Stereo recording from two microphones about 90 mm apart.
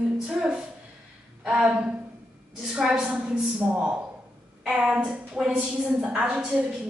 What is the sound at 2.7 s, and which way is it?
A woman's voice, 10° right (ahead or behind).